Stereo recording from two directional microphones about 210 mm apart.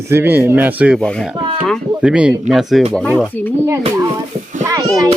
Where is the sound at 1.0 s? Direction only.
5° left (ahead or behind).